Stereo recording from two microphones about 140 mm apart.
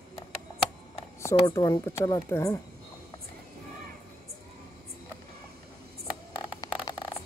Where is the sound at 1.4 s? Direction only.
30° left (ahead or behind).